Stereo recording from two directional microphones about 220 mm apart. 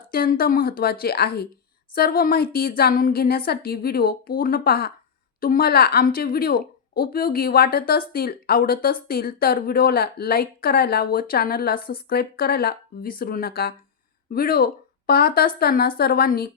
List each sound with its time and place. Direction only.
0.1 s a woman's voice: 40° left (ahead or behind)